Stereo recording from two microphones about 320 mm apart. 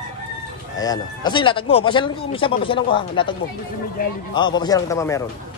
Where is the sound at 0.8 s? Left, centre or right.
Centre.